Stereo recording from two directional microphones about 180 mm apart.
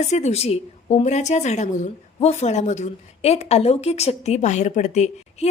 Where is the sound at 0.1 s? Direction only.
40° left (ahead or behind).